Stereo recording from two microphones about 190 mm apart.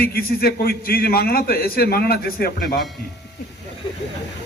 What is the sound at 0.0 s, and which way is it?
A man's voice, 50° left (ahead or behind).